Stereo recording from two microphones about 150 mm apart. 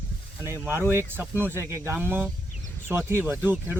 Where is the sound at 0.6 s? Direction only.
15° right (ahead or behind).